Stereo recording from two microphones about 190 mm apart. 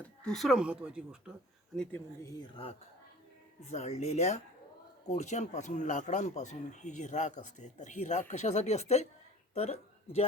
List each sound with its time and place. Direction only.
0.0 s speech: 5° left (ahead or behind)
2.2 s speech: 25° left (ahead or behind)